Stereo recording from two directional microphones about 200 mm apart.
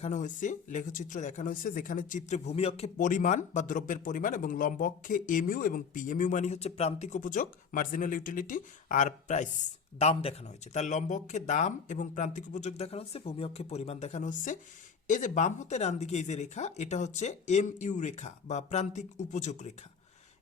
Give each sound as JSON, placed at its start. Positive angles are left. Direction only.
{"t": 0.0, "sound": "speech", "side_deg": 35}